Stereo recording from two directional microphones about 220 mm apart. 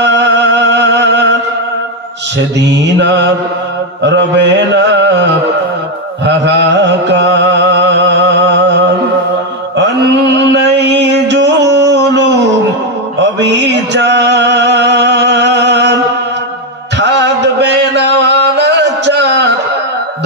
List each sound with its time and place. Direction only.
0.0 s music: 50° right (ahead or behind)
2.6 s music: 50° right (ahead or behind)
6.2 s music: 50° right (ahead or behind)
9.8 s mantra: 50° right (ahead or behind)
13.2 s a sound: 50° right (ahead or behind)
17.0 s music: 50° right (ahead or behind)